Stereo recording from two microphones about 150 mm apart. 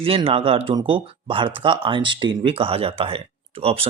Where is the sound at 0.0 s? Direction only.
40° right (ahead or behind).